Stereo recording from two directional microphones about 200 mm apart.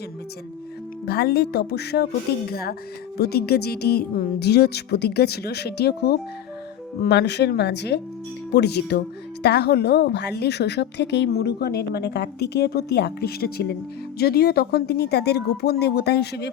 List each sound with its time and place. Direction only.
1.0 s speech: 50° left (ahead or behind)